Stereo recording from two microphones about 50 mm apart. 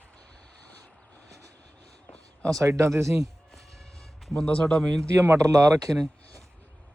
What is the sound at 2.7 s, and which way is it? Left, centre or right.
Speech, right.